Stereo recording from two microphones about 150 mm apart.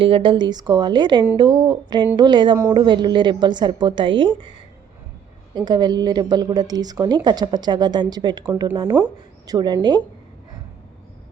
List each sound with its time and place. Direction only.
0.0 s a woman's voice: 35° right (ahead or behind)
5.5 s speech: 30° right (ahead or behind)